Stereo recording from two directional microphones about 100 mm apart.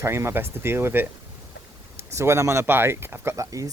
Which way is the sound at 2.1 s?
30° right (ahead or behind).